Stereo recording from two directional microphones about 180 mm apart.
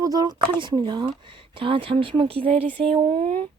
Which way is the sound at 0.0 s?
20° right (ahead or behind).